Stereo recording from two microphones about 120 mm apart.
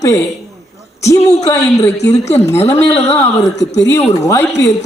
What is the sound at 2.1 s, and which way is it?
Speech, 70° left (ahead or behind).